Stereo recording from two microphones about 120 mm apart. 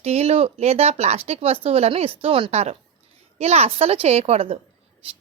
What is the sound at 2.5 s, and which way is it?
A woman's voice, 65° right (ahead or behind).